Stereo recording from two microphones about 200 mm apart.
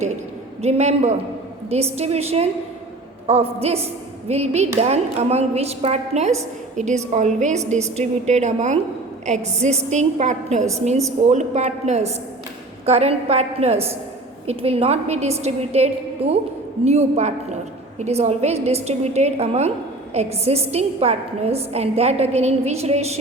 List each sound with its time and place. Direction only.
0.6 s a woman's voice: 35° right (ahead or behind)